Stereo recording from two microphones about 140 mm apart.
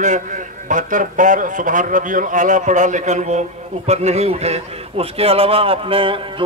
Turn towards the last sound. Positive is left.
turn(degrees=-40)  # may be behind; listen again after turning